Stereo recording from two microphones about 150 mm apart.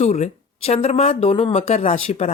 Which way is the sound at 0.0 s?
50° left (ahead or behind).